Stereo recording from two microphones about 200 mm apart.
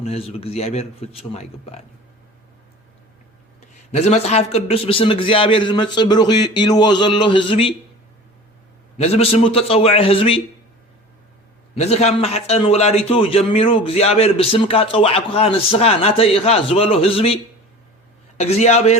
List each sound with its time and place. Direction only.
0.0 s a man's voice: 30° left (ahead or behind)
3.9 s a man's voice: 35° left (ahead or behind)
9.0 s a man's voice: 30° left (ahead or behind)
11.8 s a man's voice: 30° left (ahead or behind)